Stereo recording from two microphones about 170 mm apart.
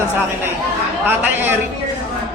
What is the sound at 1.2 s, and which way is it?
Speech, 10° right (ahead or behind).